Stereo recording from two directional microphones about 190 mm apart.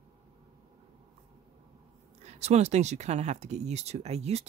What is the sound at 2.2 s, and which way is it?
Speech, 35° right (ahead or behind).